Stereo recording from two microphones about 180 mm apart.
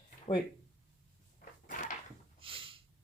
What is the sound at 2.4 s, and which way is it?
Snort, 30° right (ahead or behind).